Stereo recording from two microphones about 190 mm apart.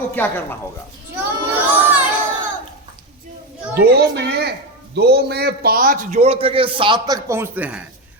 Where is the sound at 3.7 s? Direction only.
60° right (ahead or behind).